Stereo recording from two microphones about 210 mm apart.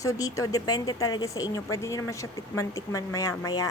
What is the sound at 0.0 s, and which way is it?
Speech, 15° left (ahead or behind).